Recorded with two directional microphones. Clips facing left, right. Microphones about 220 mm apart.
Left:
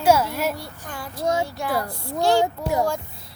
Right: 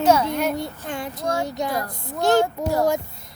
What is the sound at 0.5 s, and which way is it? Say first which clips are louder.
A child's voice: right 7 dB; 20° right (ahead or behind).